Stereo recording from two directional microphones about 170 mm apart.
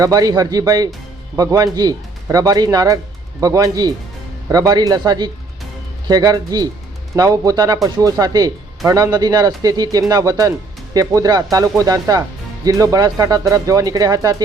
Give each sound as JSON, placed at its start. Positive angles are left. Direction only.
{"t": 0.0, "sound": "speech", "side_deg": -20}